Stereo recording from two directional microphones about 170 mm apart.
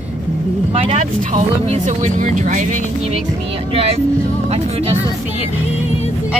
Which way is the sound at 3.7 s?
35° right (ahead or behind).